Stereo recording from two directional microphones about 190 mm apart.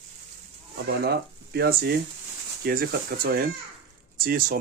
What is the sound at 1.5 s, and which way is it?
Speech, 55° right (ahead or behind).